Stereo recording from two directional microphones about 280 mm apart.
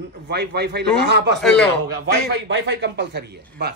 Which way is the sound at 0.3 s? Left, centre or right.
Right.